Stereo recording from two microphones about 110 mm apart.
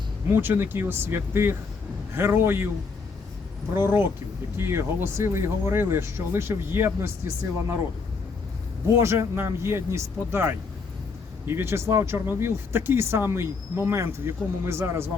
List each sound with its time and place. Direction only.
0.3 s speech: 20° right (ahead or behind)
3.8 s speech: 20° right (ahead or behind)
9.0 s speech: 25° right (ahead or behind)